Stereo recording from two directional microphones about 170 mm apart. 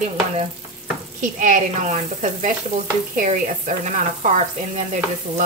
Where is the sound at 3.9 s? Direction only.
45° right (ahead or behind).